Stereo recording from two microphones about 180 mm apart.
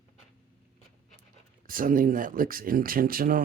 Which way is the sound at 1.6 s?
50° right (ahead or behind).